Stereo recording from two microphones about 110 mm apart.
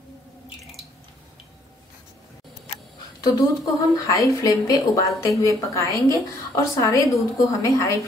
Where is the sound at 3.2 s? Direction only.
35° left (ahead or behind).